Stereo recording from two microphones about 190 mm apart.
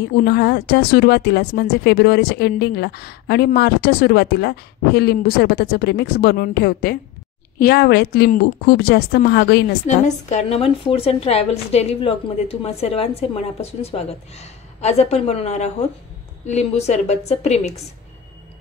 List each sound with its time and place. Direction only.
0.1 s speech: 60° left (ahead or behind)
9.8 s a woman's voice: 40° left (ahead or behind)